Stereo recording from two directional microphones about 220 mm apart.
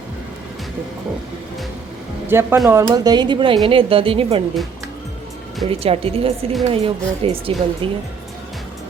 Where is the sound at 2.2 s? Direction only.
10° right (ahead or behind).